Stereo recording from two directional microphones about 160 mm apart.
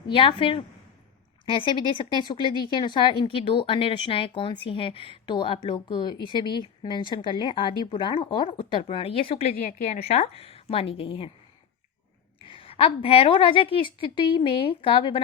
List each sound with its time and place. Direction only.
0.1 s speech: 35° left (ahead or behind)
9.5 s speech: 65° left (ahead or behind); by 11.3 s 35° left (ahead or behind)
12.4 s speech: 35° left (ahead or behind)